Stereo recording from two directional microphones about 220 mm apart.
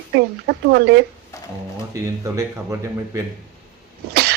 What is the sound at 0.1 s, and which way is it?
Speech, 50° right (ahead or behind).